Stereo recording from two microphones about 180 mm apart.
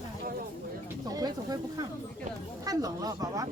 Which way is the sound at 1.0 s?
20° right (ahead or behind).